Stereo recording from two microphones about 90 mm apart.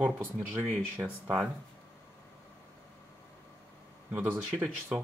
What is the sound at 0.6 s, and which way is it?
Speech, 20° right (ahead or behind).